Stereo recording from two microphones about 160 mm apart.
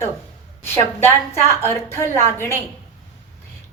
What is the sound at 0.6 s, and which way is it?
A woman's voice, 15° left (ahead or behind).